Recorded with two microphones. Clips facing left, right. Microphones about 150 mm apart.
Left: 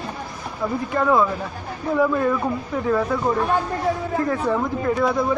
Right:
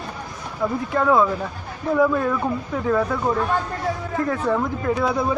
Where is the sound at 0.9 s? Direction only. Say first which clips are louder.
Right 1 dB; centre (ahead or behind).